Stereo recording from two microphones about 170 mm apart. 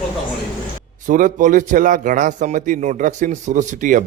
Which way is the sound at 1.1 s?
50° right (ahead or behind).